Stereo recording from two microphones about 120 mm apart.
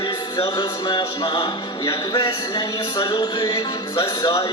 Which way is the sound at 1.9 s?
50° left (ahead or behind).